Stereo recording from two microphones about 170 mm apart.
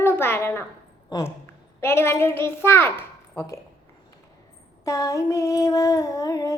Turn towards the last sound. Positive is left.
turn(degrees=20)  # may be behind; listen again after turning